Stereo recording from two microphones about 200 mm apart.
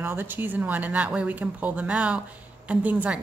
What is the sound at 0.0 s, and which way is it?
A woman's voice, 10° right (ahead or behind).